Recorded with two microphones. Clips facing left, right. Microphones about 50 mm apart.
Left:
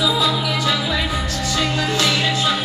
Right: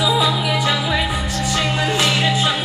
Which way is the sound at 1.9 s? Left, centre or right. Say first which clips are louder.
Right 1 dB; centre.